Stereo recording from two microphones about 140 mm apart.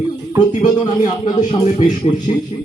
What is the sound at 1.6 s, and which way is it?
Speech, 55° left (ahead or behind).